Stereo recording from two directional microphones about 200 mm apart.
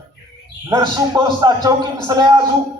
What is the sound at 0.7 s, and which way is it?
A man's voice, 20° right (ahead or behind).